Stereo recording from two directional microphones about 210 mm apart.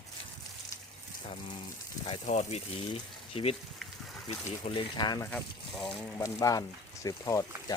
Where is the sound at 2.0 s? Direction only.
30° left (ahead or behind).